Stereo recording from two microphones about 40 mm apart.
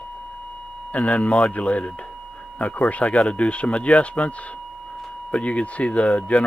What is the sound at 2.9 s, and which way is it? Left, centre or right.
Speech, left.